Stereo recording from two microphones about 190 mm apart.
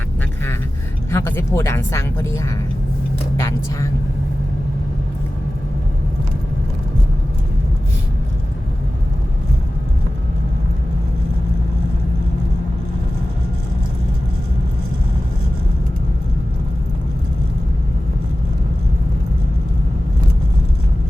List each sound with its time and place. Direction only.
1.1 s speech: 15° left (ahead or behind)